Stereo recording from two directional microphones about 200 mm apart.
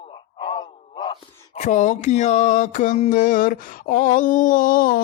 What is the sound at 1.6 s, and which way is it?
Mantra, 40° left (ahead or behind).